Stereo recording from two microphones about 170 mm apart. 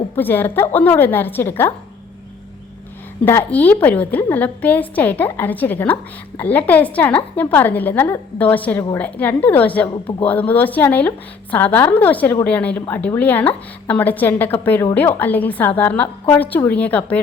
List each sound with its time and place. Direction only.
0.2 s a woman's voice: 10° left (ahead or behind)
3.2 s a woman's voice: 10° left (ahead or behind)
9.0 s a woman's voice: 10° left (ahead or behind)
9.9 s speech: 25° left (ahead or behind)
10.2 s a woman's voice: 10° left (ahead or behind)